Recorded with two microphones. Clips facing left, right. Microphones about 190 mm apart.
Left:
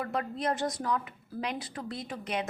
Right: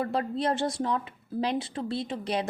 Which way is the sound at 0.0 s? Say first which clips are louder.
Right 4 dB; 30° right (ahead or behind).